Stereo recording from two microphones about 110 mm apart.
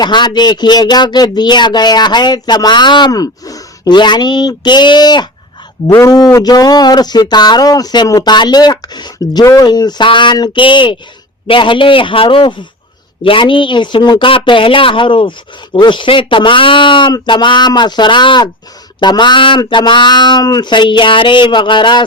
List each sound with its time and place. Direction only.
0.0 s speech: 40° left (ahead or behind)
5.9 s a woman's voice: 30° left (ahead or behind); by 22.0 s 45° left (ahead or behind)